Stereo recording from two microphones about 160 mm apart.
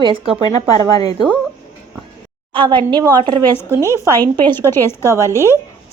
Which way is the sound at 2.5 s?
30° right (ahead or behind).